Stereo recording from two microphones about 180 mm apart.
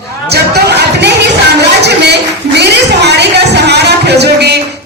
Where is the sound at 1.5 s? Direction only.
70° right (ahead or behind).